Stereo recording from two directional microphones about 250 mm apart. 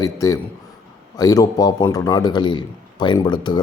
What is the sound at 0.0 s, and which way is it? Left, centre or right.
A man's voice, centre.